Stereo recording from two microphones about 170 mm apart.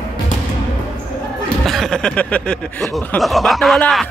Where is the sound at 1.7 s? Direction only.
5° left (ahead or behind).